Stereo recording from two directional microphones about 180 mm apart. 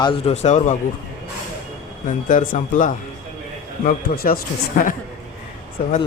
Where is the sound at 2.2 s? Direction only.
50° left (ahead or behind).